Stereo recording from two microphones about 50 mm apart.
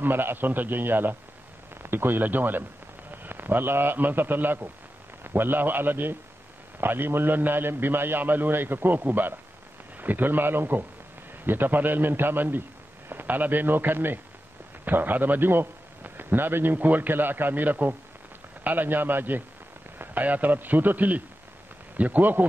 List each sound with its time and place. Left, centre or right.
0.0 s a man's voice: right